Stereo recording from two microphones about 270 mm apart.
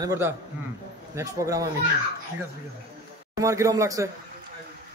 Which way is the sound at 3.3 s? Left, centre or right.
Centre.